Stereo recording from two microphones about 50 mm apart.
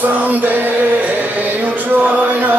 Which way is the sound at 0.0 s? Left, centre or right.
Right.